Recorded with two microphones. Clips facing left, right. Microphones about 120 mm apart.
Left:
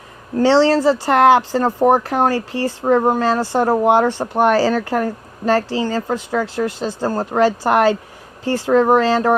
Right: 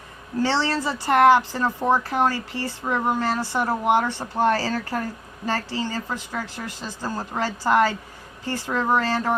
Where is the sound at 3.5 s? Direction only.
75° left (ahead or behind).